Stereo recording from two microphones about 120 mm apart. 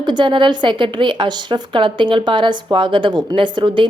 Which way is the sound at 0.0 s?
40° right (ahead or behind).